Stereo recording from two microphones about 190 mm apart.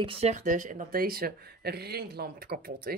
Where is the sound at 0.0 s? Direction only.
30° right (ahead or behind); by 3.0 s 55° right (ahead or behind).